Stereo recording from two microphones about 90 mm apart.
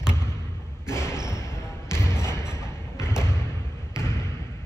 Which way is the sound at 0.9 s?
30° left (ahead or behind).